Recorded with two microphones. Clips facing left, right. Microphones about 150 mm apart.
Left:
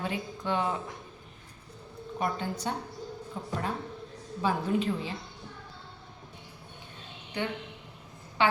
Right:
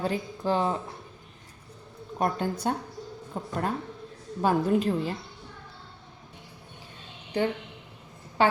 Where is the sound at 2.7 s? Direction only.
50° right (ahead or behind).